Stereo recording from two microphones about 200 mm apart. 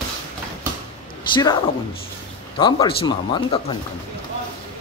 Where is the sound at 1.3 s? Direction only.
20° left (ahead or behind).